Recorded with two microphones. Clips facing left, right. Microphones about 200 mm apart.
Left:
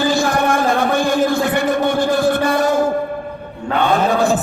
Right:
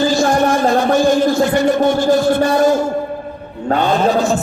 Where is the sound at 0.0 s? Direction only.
60° left (ahead or behind).